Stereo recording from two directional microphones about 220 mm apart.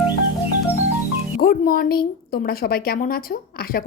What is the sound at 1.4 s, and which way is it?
A woman's voice, 45° left (ahead or behind).